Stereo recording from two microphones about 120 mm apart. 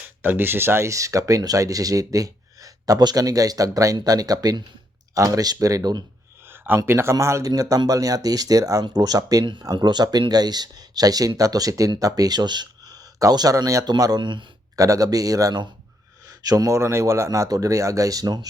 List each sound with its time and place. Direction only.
0.2 s speech: 20° right (ahead or behind); by 6.1 s 35° right (ahead or behind)
6.5 s speech: 20° right (ahead or behind); by 14.4 s 40° right (ahead or behind)
14.8 s speech: 30° right (ahead or behind)